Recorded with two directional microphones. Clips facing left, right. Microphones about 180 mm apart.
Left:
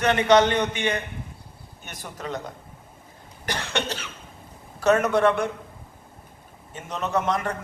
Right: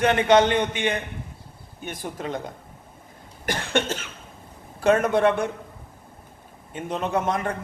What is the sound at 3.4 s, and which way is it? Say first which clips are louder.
Cough: right 4 dB; 50° right (ahead or behind).